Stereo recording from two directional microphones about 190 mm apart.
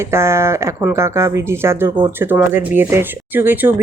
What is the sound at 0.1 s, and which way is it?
A woman's voice, 15° right (ahead or behind).